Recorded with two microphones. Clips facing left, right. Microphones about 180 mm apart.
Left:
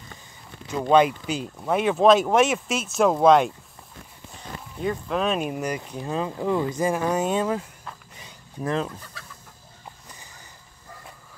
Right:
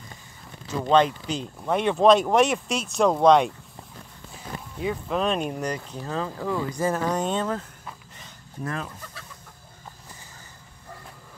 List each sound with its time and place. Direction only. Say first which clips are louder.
0.8 s speech: left 2 dB; 10° left (ahead or behind)
4.7 s speech: left 1 dB; centre (ahead or behind)
8.2 s a sound: left 3 dB; 20° left (ahead or behind)